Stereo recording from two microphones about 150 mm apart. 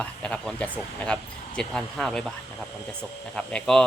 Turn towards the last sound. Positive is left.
turn(degrees=5)  # may be behind; listen again after turning